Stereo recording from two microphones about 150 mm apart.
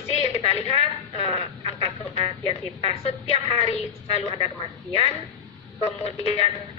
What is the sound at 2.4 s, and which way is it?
Speech, 40° left (ahead or behind).